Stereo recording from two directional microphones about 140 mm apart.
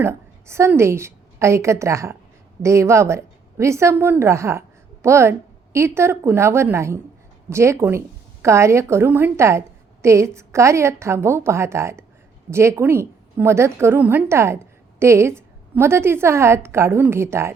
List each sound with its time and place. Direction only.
0.0 s a woman's voice: 20° right (ahead or behind)